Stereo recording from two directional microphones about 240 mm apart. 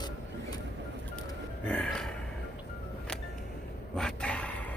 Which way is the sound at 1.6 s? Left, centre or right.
Centre.